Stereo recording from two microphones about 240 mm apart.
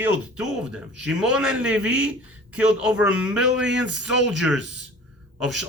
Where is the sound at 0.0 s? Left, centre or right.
Centre.